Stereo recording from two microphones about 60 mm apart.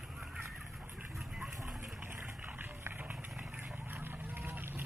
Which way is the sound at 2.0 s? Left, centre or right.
Right.